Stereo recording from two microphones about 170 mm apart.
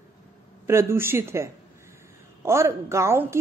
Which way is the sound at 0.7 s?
15° right (ahead or behind).